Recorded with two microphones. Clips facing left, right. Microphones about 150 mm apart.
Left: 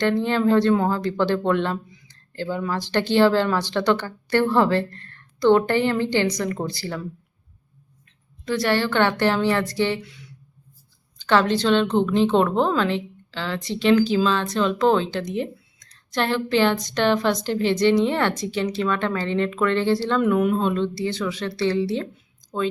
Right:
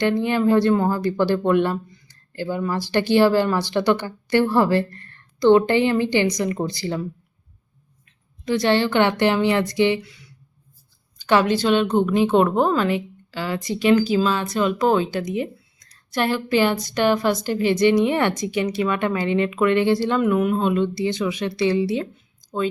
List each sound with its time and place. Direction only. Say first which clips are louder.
0.0 s a woman's voice: right 1 dB; 15° right (ahead or behind)
8.4 s a woman's voice: right 3 dB; 20° right (ahead or behind)
10.0 s a woman's voice: left 1 dB; centre (ahead or behind)
20.2 s a woman's voice: even; centre (ahead or behind)